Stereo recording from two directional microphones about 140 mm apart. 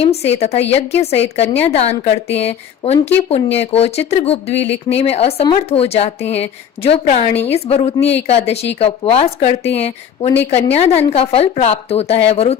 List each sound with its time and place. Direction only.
0.0 s a woman's voice: 45° left (ahead or behind)